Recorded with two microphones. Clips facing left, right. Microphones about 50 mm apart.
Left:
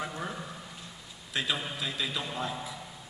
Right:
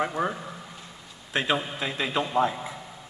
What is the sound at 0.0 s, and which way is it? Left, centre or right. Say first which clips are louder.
A man's voice: right 9 dB; right.